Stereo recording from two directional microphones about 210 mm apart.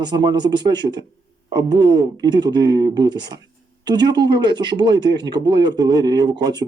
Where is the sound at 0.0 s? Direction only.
20° right (ahead or behind).